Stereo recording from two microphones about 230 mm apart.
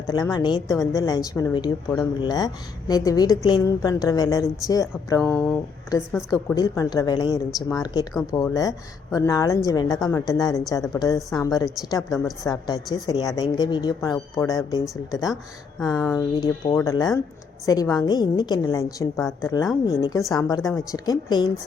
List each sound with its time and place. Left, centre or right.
0.1 s a woman's voice: centre